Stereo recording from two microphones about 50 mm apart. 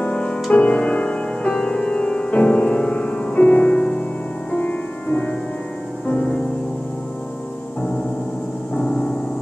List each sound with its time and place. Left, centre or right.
0.0 s music: left
8.7 s piano: centre